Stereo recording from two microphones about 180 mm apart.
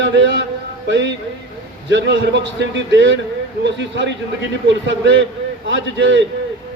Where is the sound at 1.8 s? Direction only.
85° right.